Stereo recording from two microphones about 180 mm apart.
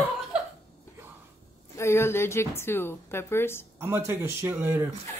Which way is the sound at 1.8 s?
15° left (ahead or behind).